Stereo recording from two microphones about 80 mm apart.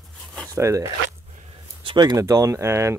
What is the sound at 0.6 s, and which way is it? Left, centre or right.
Speech, right.